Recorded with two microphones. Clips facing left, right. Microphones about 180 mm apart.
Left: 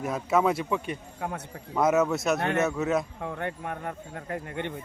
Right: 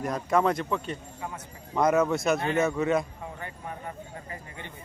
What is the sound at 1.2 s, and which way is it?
Speech, 60° left (ahead or behind).